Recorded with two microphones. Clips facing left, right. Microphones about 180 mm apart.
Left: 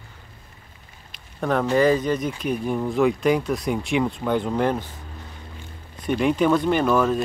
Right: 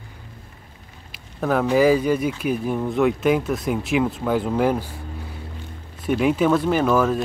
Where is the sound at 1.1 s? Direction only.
5° right (ahead or behind).